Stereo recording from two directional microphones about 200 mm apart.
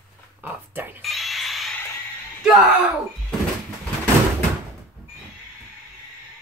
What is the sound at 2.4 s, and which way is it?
Door, centre (ahead or behind).